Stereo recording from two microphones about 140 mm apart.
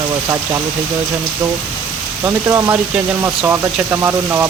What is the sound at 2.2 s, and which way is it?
Speech, 20° right (ahead or behind).